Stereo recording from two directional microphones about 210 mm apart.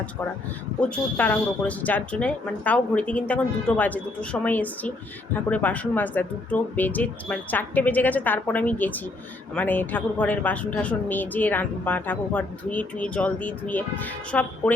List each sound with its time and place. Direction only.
0.8 s speech: 5° left (ahead or behind)